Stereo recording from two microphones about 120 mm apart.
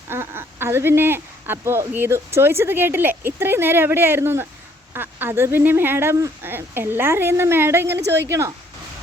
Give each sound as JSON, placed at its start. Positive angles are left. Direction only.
{"t": 0.1, "sound": "speech", "side_deg": -20}